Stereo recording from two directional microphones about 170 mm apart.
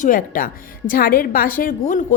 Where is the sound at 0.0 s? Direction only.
55° left (ahead or behind).